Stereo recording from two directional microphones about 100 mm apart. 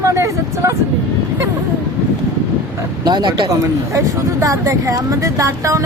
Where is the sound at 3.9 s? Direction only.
30° right (ahead or behind).